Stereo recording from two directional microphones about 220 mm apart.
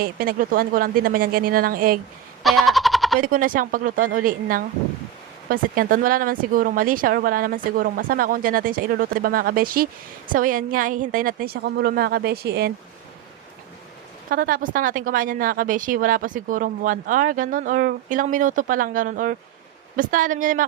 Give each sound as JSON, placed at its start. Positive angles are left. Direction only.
{"t": 0.0, "sound": "a woman's voice", "side_deg": -40}
{"t": 2.4, "sound": "a sound", "side_deg": 0}
{"t": 3.2, "sound": "a woman's voice", "side_deg": -40}
{"t": 14.3, "sound": "a woman's voice", "side_deg": -40}